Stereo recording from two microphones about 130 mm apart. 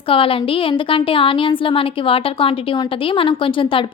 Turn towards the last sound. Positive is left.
turn(degrees=40)  # may be behind; listen again after turning